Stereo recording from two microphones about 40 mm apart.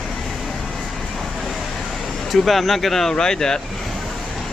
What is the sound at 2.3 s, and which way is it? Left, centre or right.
Speech, centre.